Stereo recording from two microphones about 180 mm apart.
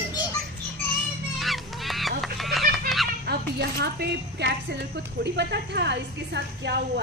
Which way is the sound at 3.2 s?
65° right (ahead or behind).